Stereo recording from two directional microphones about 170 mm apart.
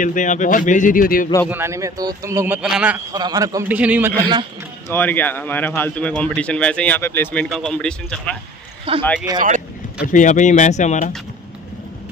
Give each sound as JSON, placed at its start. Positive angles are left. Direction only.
{"t": 0.0, "sound": "speech", "side_deg": 50}
{"t": 1.5, "sound": "a man's voice", "side_deg": -15}
{"t": 3.1, "sound": "a man's voice", "side_deg": -20}
{"t": 3.6, "sound": "a man's voice", "side_deg": -10}
{"t": 4.2, "sound": "a man's voice", "side_deg": -25}
{"t": 4.8, "sound": "speech", "side_deg": 10}
{"t": 7.4, "sound": "speech", "side_deg": 0}
{"t": 8.9, "sound": "a man's voice", "side_deg": -30}
{"t": 10.0, "sound": "speech", "side_deg": 50}